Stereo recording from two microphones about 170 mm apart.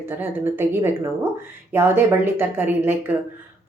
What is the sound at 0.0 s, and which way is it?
A woman's voice, 15° right (ahead or behind).